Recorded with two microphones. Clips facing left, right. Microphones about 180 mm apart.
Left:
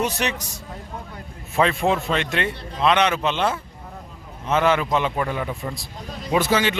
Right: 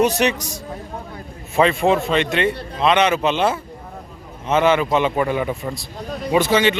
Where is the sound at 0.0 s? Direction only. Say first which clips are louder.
Right 7 dB; 15° right (ahead or behind).